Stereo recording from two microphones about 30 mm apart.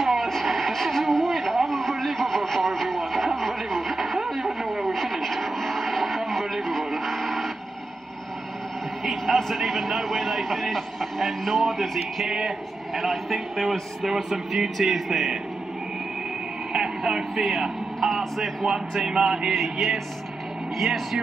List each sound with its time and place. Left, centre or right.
0.0 s a sound: centre
6.9 s radio: centre
9.0 s a sound: centre
12.9 s a man's voice: centre
16.7 s radio: right
18.6 s speech: centre
19.5 s a man's voice: centre